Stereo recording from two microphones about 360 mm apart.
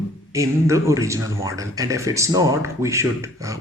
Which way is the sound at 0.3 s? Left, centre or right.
Centre.